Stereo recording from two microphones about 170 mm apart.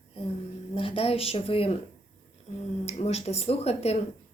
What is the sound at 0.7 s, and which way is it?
Speech, 35° left (ahead or behind).